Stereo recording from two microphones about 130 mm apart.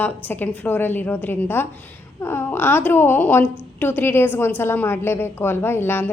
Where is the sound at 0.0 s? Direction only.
15° left (ahead or behind).